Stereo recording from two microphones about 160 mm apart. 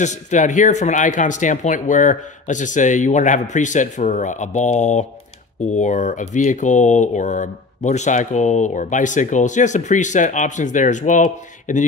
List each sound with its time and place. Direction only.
0.0 s speech: 50° left (ahead or behind)